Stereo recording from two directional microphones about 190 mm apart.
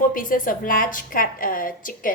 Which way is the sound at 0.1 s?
45° left (ahead or behind).